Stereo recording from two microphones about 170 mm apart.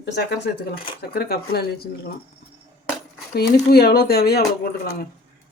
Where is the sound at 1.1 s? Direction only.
70° left (ahead or behind).